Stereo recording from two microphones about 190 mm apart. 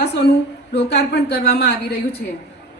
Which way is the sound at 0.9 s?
60° left (ahead or behind).